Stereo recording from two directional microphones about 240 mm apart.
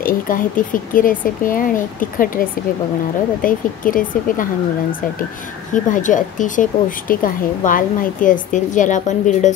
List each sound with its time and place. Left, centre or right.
0.0 s speech: left
5.7 s speech: left